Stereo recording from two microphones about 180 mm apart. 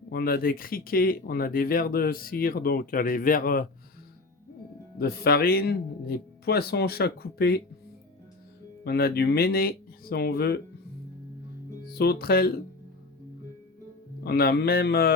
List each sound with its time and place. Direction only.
0.1 s speech: 60° left (ahead or behind)
4.9 s speech: 60° left (ahead or behind)
8.8 s speech: 60° left (ahead or behind)
11.9 s speech: 60° left (ahead or behind)
14.3 s speech: 60° left (ahead or behind)